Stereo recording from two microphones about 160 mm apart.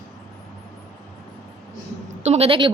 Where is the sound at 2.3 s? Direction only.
40° right (ahead or behind).